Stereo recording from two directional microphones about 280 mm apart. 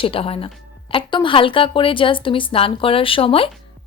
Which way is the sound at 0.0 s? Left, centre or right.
Centre.